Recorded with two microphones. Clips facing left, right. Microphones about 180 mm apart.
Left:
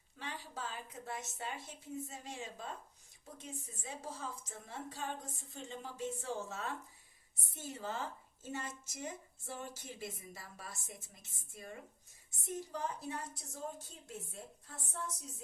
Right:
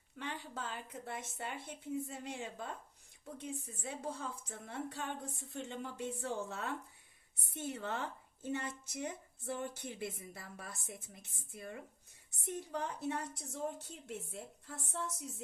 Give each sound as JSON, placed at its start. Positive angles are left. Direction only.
{"t": 0.2, "sound": "a woman's voice", "side_deg": -60}